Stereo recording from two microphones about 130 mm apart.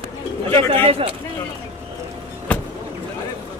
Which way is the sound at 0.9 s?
50° right (ahead or behind).